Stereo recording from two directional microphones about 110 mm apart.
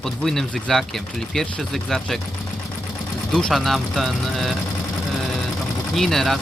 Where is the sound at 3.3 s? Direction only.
Centre (ahead or behind).